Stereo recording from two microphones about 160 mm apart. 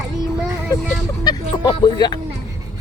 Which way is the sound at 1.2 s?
25° left (ahead or behind).